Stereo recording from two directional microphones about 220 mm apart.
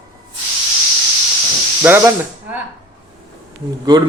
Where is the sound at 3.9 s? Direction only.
20° right (ahead or behind).